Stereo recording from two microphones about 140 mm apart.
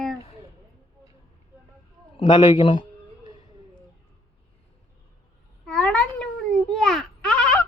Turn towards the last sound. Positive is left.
turn(degrees=5)  # may be behind; listen again after turning